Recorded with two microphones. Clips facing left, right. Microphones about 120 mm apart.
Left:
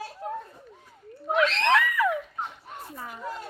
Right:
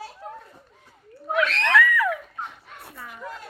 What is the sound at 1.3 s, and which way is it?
Screaming, 25° left (ahead or behind).